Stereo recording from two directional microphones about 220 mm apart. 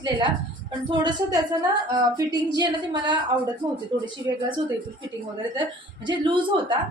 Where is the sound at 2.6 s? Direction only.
20° right (ahead or behind).